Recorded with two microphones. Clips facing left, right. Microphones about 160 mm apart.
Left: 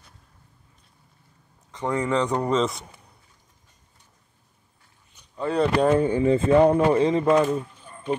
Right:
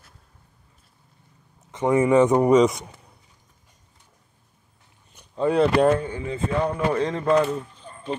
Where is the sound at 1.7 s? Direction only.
20° right (ahead or behind).